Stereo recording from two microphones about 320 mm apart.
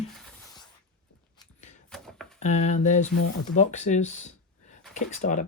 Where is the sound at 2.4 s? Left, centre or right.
Left.